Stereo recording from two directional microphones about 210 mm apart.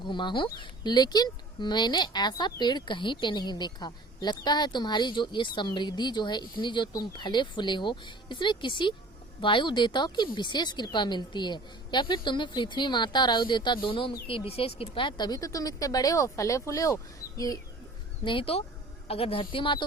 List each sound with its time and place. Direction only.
0.0 s speech: 20° left (ahead or behind)